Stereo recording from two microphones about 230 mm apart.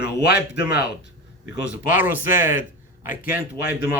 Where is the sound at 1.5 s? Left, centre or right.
Centre.